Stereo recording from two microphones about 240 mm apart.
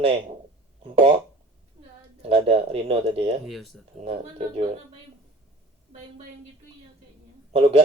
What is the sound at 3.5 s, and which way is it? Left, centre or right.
Speech, centre.